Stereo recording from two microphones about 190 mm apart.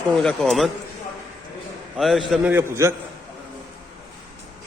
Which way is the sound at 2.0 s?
Centre (ahead or behind).